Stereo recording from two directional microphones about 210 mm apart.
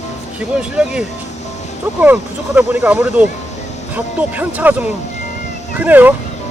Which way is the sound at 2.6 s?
5° right (ahead or behind).